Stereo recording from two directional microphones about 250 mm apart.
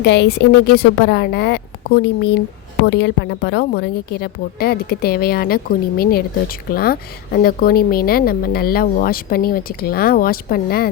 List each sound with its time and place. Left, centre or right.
0.0 s a woman's voice: left